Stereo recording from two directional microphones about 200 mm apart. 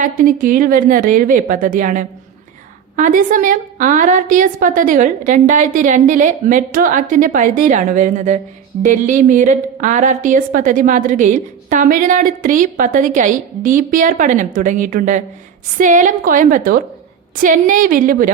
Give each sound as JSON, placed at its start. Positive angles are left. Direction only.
{"t": 0.0, "sound": "a woman's voice", "side_deg": -40}